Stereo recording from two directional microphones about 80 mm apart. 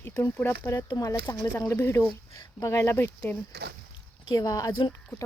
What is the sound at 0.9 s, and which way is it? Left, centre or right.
Speech, left.